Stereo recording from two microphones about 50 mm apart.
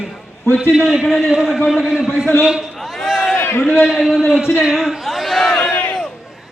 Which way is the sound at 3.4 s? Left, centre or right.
Left.